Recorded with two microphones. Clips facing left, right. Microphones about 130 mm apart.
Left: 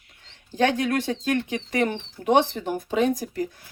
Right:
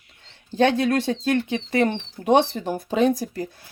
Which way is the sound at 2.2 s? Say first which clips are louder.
Right 2 dB; 25° right (ahead or behind).